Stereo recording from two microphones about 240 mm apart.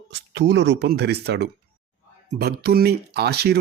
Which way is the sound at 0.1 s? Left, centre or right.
Right.